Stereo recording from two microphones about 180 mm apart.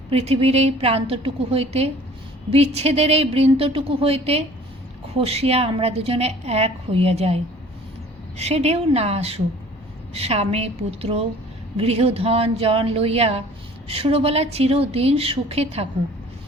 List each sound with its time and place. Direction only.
0.1 s a woman's voice: 35° right (ahead or behind)